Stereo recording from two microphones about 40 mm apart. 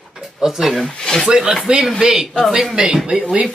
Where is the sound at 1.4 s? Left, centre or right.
Centre.